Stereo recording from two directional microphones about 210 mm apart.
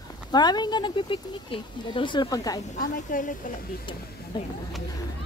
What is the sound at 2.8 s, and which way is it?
Speech, 40° left (ahead or behind).